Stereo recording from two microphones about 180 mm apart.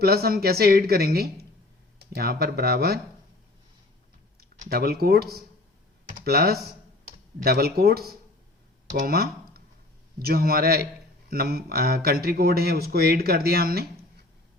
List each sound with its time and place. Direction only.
0.0 s speech: 60° right (ahead or behind)
4.7 s speech: 60° right (ahead or behind)